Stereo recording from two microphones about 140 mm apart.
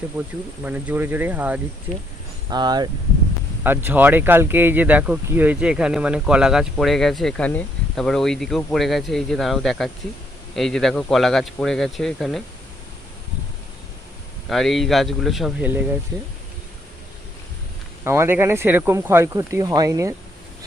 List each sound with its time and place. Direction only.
0.1 s speech: 10° right (ahead or behind)
2.5 s speech: 30° right (ahead or behind)
3.6 s speech: 15° right (ahead or behind); by 12.4 s centre (ahead or behind)
14.5 s speech: centre (ahead or behind)
18.0 s speech: 20° right (ahead or behind)